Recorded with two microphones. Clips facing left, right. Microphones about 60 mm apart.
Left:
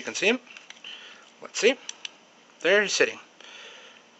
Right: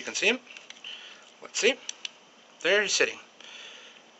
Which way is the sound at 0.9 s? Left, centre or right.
Centre.